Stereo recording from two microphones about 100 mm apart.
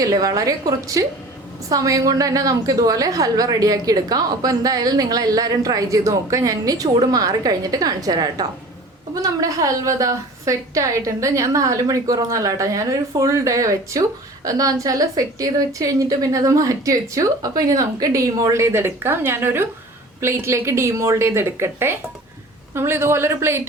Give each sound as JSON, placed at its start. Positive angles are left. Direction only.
{"t": 0.0, "sound": "a woman's voice", "side_deg": -40}